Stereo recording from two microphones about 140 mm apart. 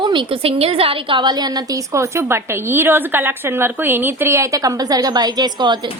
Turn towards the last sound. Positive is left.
turn(degrees=-30)  # may be behind; listen again after turning